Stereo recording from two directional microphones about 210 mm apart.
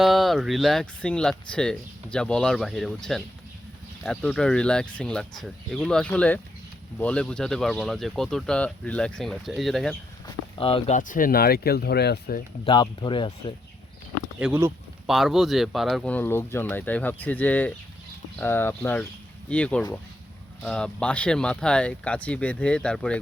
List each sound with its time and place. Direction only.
0.0 s speech: centre (ahead or behind)
10.2 s speech: 25° left (ahead or behind)
10.9 s speech: 40° left (ahead or behind)
12.6 s speech: 20° left (ahead or behind)
14.3 s speech: 5° right (ahead or behind)